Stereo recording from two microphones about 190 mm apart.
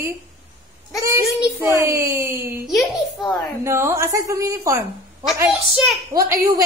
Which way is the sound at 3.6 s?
15° right (ahead or behind).